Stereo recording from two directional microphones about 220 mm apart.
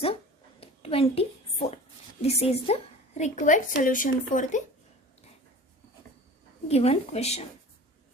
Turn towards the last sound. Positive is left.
turn(degrees=30)  # may be behind; listen again after turning